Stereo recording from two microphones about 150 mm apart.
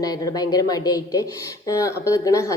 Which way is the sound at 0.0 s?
25° left (ahead or behind).